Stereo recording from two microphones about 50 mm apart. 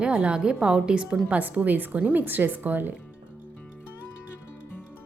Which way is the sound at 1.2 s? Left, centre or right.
Right.